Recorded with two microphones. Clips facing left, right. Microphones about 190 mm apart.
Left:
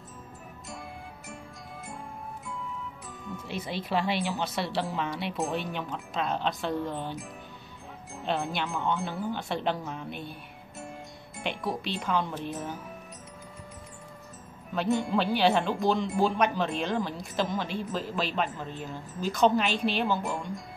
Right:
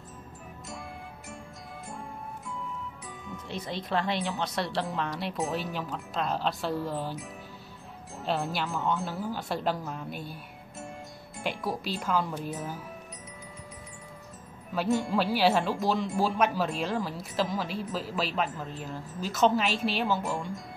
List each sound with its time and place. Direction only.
3.3 s speech: 5° left (ahead or behind)
8.3 s speech: 5° right (ahead or behind)
11.3 s speech: centre (ahead or behind)
14.7 s speech: centre (ahead or behind)